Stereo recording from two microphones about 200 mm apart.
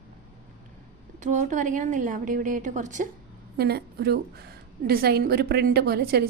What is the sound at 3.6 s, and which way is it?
A woman's voice, 55° right (ahead or behind).